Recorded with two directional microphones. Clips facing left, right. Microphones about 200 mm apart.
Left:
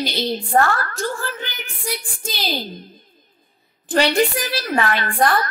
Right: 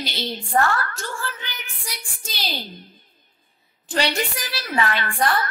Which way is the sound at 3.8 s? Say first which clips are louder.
Left 7 dB; 55° left (ahead or behind).